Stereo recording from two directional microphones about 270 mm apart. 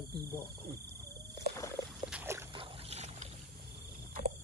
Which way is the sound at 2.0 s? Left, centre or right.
Centre.